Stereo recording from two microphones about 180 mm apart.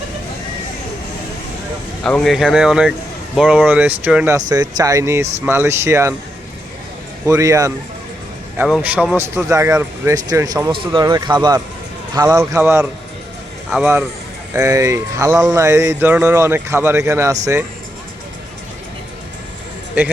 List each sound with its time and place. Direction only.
2.0 s speech: 5° left (ahead or behind)
4.4 s speech: 20° right (ahead or behind)
7.3 s speech: 20° right (ahead or behind)
8.5 s speech: 5° right (ahead or behind)
14.5 s speech: 15° right (ahead or behind)